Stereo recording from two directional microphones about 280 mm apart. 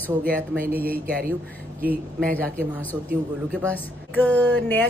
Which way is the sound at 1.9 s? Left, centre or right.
Centre.